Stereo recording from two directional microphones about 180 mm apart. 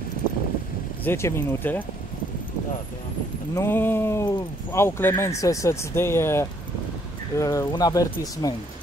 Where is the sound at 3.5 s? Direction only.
10° left (ahead or behind).